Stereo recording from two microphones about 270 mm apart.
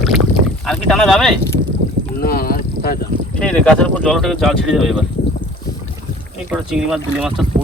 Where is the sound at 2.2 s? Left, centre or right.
Left.